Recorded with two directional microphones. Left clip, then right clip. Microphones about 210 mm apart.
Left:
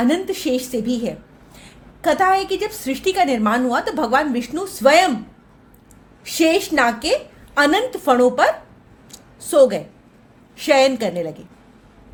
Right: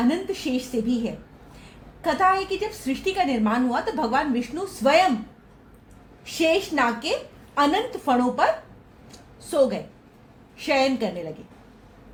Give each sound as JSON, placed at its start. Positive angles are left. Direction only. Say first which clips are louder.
{"t": 0.1, "sound": "a woman's voice", "louder": "left 6 dB", "side_deg": 60}
{"t": 6.2, "sound": "a woman's voice", "louder": "left 5 dB", "side_deg": 55}
{"t": 9.1, "sound": "a sound", "louder": "left 7 dB", "side_deg": 55}
{"t": 10.6, "sound": "a woman's voice", "louder": "left 7 dB", "side_deg": 55}